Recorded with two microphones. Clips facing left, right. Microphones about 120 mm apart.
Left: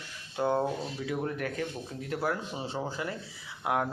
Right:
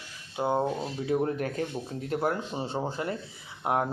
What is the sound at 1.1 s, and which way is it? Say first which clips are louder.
A man's voice: right 6 dB; 30° right (ahead or behind).